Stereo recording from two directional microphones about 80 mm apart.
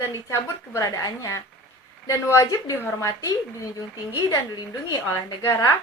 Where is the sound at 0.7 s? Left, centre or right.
Left.